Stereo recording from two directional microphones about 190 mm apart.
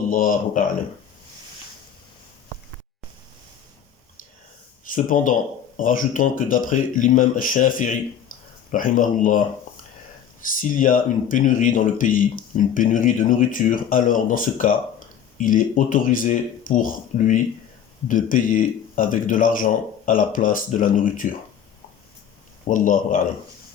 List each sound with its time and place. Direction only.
0.1 s speech: 45° left (ahead or behind)
4.9 s speech: 45° left (ahead or behind)
10.4 s speech: 45° left (ahead or behind)
22.6 s speech: 45° left (ahead or behind)